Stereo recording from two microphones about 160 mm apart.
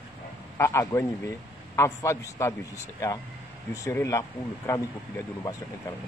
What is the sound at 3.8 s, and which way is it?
Speech, 20° left (ahead or behind).